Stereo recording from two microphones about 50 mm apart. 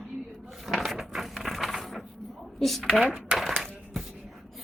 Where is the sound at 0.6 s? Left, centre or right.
Centre.